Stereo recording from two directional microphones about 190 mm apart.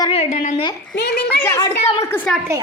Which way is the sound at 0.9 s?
60° left (ahead or behind).